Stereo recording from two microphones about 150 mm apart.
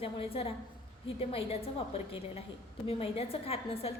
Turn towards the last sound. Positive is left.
turn(degrees=40)  # may be behind; listen again after turning